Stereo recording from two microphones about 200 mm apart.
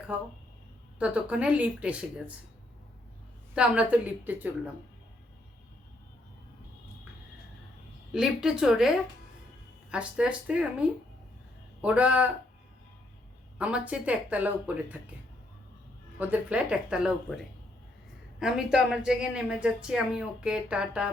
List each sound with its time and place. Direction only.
0.1 s speech: 5° right (ahead or behind)
3.5 s speech: 5° right (ahead or behind)
8.1 s speech: 5° right (ahead or behind)
9.9 s speech: 5° right (ahead or behind)
13.6 s speech: 5° right (ahead or behind)
16.1 s speech: 5° right (ahead or behind)